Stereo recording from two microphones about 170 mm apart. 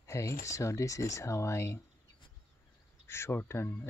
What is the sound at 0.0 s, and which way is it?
Speech, 15° left (ahead or behind).